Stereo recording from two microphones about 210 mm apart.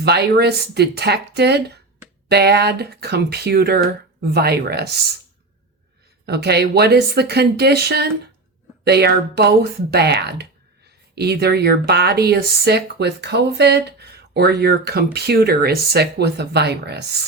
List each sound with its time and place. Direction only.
0.0 s speech: 50° right (ahead or behind)
6.2 s speech: 50° right (ahead or behind)